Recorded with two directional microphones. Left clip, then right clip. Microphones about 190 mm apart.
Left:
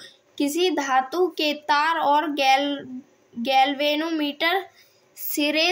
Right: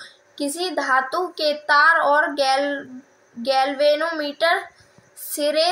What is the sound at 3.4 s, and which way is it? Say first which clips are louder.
Speech: right 1 dB; 60° left (ahead or behind).